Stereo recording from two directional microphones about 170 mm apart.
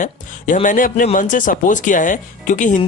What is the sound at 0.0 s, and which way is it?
Speech, 50° left (ahead or behind).